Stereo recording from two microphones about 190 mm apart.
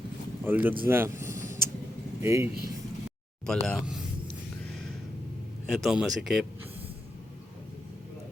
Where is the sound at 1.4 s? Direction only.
50° right (ahead or behind).